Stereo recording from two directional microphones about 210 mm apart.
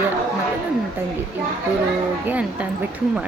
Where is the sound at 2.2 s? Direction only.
5° right (ahead or behind).